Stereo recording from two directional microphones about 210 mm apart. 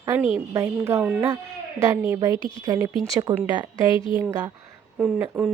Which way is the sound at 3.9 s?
25° left (ahead or behind).